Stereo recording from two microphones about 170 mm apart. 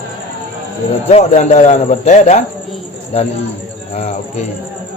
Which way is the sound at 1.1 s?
40° left (ahead or behind).